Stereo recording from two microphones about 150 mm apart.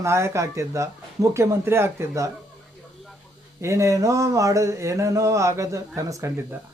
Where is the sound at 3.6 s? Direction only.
20° right (ahead or behind).